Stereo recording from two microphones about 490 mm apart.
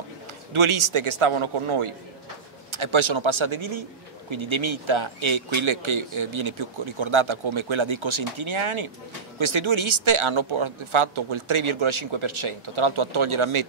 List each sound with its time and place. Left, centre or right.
0.5 s a man's voice: right